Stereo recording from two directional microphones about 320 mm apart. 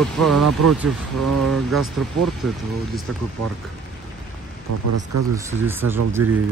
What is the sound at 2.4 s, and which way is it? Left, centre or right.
Speech, centre.